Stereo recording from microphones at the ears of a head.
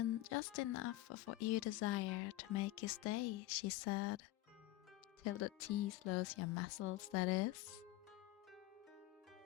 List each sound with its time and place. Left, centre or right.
0.0 s speech: left
5.2 s speech: left